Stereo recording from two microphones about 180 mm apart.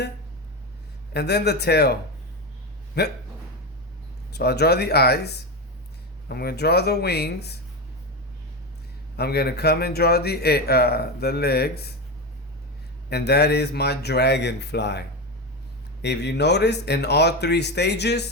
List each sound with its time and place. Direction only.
1.1 s speech: 65° left (ahead or behind)
4.3 s speech: 65° left (ahead or behind)
9.1 s speech: 65° left (ahead or behind)
13.1 s speech: 65° left (ahead or behind)